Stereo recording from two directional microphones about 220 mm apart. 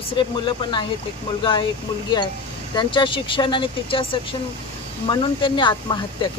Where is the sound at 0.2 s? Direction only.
20° left (ahead or behind).